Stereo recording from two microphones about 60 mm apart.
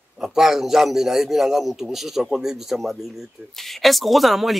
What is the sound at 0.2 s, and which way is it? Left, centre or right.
A man's voice, centre.